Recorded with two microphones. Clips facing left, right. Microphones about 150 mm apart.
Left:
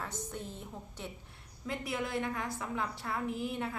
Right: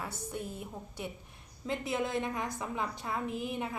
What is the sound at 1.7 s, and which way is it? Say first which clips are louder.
A woman's voice: right 3 dB; 20° right (ahead or behind).